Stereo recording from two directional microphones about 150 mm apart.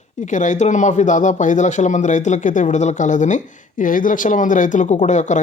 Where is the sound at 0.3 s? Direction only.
55° left (ahead or behind).